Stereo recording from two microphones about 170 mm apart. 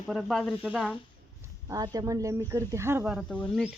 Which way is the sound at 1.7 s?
20° right (ahead or behind).